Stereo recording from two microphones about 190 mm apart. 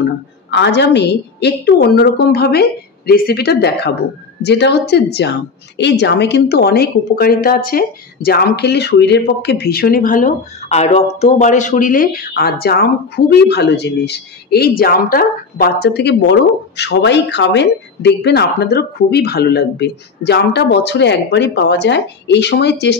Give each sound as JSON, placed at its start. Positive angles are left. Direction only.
{"t": 0.0, "sound": "speech", "side_deg": 65}